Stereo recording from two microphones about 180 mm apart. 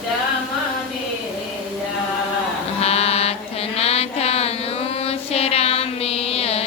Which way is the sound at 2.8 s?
35° left (ahead or behind).